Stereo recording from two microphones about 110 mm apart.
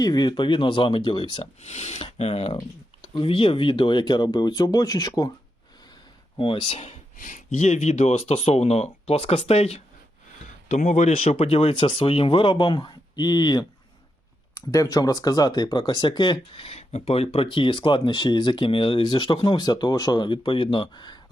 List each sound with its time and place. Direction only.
0.0 s speech: 40° left (ahead or behind)
1.6 s speech: 85° left; by 2.6 s 65° left (ahead or behind)
2.6 s speech: 45° left (ahead or behind)
6.4 s speech: 50° left (ahead or behind)
7.6 s speech: 90° left; by 9.8 s 70° left (ahead or behind)
10.7 s speech: 90° left
11.1 s speech: 70° left (ahead or behind); by 16.6 s 45° left (ahead or behind)
16.6 s speech: 70° left (ahead or behind); by 21.2 s 45° left (ahead or behind)